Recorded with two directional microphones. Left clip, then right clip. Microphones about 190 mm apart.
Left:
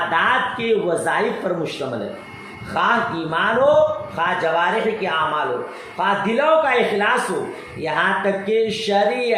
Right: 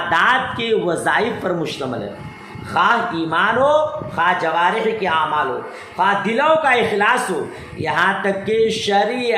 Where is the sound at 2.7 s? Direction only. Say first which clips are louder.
Right 3 dB; 25° right (ahead or behind).